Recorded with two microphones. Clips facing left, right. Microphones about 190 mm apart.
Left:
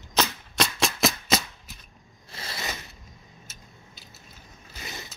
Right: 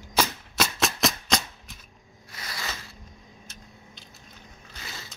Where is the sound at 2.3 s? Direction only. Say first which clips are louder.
Left 2 dB; 25° left (ahead or behind).